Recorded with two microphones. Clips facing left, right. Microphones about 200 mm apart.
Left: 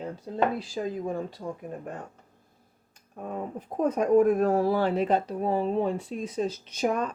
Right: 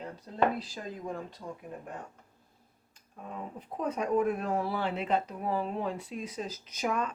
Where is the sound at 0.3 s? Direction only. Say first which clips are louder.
Left 9 dB; 10° left (ahead or behind).